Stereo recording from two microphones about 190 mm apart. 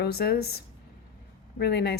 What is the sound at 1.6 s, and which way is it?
Speech, 60° left (ahead or behind).